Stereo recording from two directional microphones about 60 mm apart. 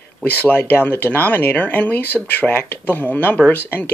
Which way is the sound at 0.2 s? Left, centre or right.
Left.